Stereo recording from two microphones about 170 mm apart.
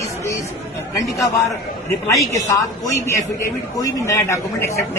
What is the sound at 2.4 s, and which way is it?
A man's voice, 15° left (ahead or behind).